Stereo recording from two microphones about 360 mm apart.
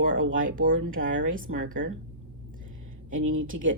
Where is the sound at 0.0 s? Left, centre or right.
Right.